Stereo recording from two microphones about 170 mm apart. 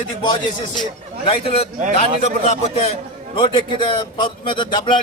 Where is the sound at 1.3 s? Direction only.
35° left (ahead or behind).